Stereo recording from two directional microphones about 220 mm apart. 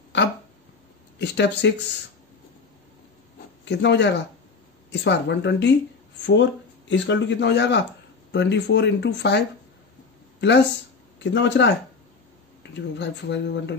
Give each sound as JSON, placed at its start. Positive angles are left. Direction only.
{"t": 1.2, "sound": "speech", "side_deg": 50}
{"t": 3.6, "sound": "speech", "side_deg": 50}
{"t": 6.9, "sound": "speech", "side_deg": 55}
{"t": 10.4, "sound": "speech", "side_deg": 50}
{"t": 12.9, "sound": "speech", "side_deg": 55}